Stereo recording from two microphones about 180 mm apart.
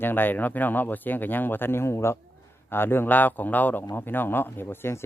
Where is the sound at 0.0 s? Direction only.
10° left (ahead or behind).